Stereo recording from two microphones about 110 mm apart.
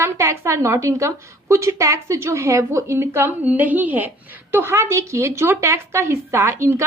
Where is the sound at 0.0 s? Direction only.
25° right (ahead or behind).